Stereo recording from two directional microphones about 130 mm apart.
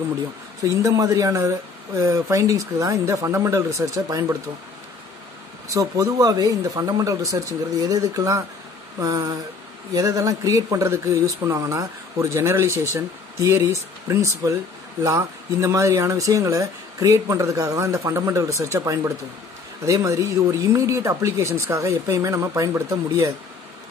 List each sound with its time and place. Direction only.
0.6 s speech: 25° right (ahead or behind)
5.7 s speech: 30° right (ahead or behind)